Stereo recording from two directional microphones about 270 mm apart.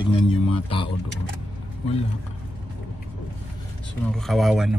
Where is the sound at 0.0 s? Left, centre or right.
Centre.